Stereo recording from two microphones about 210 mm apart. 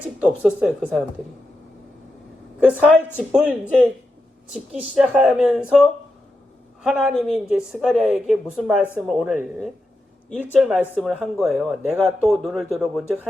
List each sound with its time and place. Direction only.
0.0 s speech: 5° right (ahead or behind)
2.6 s speech: 5° right (ahead or behind)